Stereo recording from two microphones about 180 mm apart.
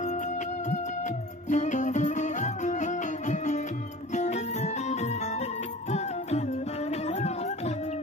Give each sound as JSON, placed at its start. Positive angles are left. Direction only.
{"t": 0.7, "sound": "music", "side_deg": 40}